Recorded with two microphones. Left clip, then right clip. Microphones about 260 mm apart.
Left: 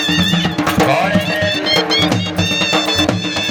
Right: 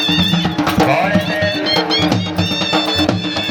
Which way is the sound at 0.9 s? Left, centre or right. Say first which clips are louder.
Left 1 dB; left.